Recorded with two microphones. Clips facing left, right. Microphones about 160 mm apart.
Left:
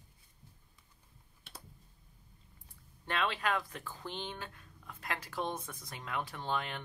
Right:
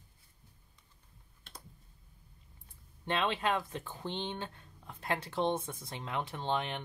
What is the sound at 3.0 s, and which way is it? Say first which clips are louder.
Speech: right 2 dB; 20° right (ahead or behind).